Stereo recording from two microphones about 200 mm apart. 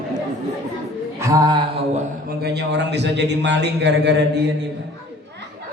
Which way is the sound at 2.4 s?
55° right (ahead or behind).